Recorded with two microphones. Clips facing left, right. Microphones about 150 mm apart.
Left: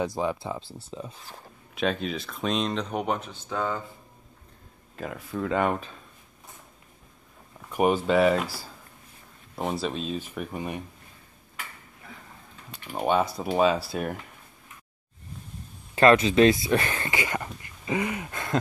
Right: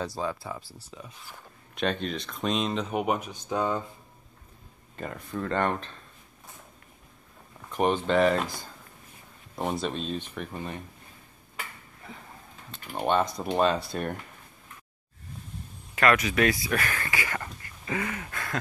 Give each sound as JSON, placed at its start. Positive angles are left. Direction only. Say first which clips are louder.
{"t": 0.0, "sound": "speech", "louder": "left 4 dB", "side_deg": 20}
{"t": 1.8, "sound": "speech", "louder": "left 2 dB", "side_deg": 5}
{"t": 4.9, "sound": "speech", "louder": "left 2 dB", "side_deg": 0}
{"t": 7.7, "sound": "speech", "louder": "left 2 dB", "side_deg": 10}
{"t": 12.7, "sound": "speech", "louder": "left 1 dB", "side_deg": 5}
{"t": 15.9, "sound": "speech", "louder": "left 5 dB", "side_deg": 30}